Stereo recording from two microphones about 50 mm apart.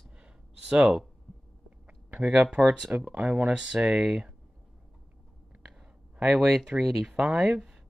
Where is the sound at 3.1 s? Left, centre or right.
Right.